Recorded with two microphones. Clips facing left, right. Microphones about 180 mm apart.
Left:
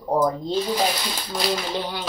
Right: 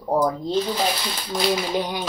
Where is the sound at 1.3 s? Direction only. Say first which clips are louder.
Right 3 dB; 10° right (ahead or behind).